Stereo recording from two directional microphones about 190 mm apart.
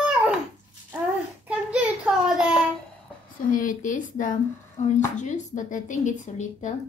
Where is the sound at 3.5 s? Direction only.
45° left (ahead or behind).